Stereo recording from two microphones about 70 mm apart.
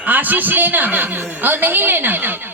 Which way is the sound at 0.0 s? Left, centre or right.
Right.